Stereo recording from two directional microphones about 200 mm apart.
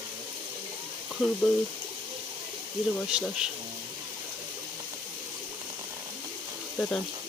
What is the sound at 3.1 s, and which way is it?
Speech, 5° right (ahead or behind).